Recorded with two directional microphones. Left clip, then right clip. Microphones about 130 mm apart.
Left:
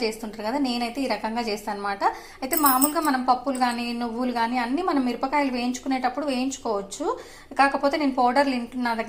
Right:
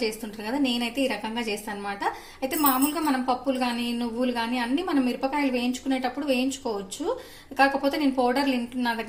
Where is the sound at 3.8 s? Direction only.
15° right (ahead or behind).